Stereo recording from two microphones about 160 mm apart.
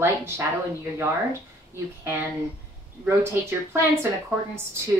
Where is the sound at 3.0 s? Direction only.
15° right (ahead or behind).